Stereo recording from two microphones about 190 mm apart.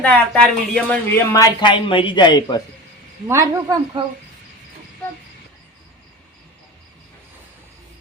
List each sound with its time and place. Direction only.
0.0 s speech: 5° left (ahead or behind)
1.3 s speech: 20° left (ahead or behind)
3.2 s speech: 15° right (ahead or behind)